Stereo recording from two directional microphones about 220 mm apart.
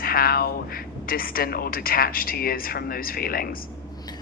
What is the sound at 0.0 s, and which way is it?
A man's voice, 40° left (ahead or behind).